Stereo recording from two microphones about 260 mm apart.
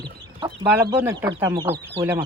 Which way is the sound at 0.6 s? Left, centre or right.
Centre.